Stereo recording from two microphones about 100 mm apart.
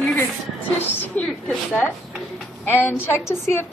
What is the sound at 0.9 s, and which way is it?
Speech, 20° left (ahead or behind).